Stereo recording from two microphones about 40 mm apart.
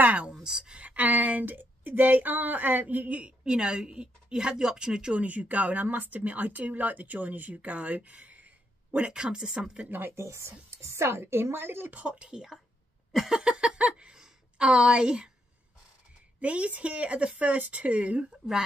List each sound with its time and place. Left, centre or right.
0.0 s a sound: right
0.3 s speech: centre
0.7 s a woman's voice: right
3.2 s speech: right
5.1 s speech: right
9.1 s speech: right
9.8 s speech: right
11.0 s a woman's voice: right
11.9 s speech: right
13.4 s a sound: right
16.3 s speech: right